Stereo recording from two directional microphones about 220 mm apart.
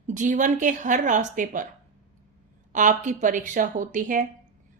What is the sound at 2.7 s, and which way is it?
A woman's voice, 35° right (ahead or behind).